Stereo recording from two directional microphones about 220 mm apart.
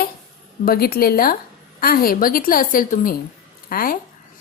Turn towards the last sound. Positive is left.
turn(degrees=40)  # may be behind; listen again after turning